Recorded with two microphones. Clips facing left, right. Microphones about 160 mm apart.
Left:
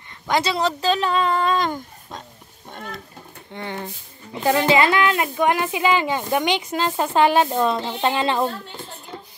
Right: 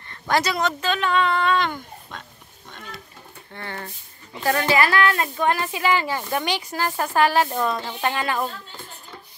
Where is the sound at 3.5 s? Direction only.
15° left (ahead or behind).